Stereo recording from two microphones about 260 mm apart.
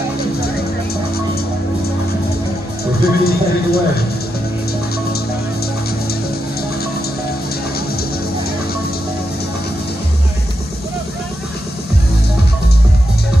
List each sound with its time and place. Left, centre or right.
2.8 s speech: left